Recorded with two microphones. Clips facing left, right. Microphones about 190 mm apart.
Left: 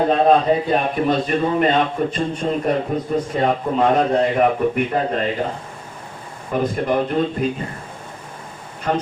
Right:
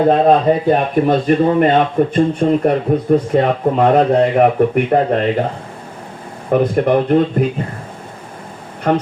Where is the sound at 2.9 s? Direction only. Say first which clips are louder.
Right 8 dB; 60° right (ahead or behind).